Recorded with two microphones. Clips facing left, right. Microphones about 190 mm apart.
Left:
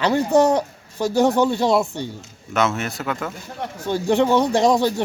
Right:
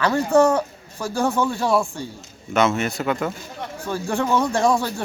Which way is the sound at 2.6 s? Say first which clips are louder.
Right 2 dB; centre (ahead or behind).